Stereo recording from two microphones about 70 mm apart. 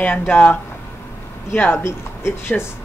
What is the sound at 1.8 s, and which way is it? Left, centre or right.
Speech, left.